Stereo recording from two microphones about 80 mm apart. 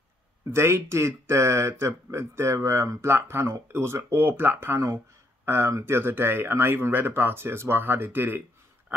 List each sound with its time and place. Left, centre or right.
0.5 s speech: right